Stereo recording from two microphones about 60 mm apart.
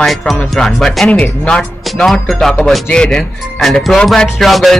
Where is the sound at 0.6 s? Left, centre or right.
Centre.